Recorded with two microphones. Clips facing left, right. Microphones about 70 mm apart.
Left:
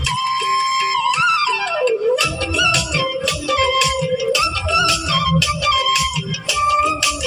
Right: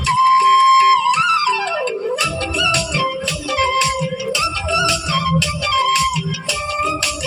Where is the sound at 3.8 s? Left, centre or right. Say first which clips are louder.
Left 1 dB; right.